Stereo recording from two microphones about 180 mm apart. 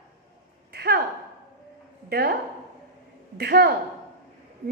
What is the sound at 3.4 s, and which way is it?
Speech, 65° right (ahead or behind).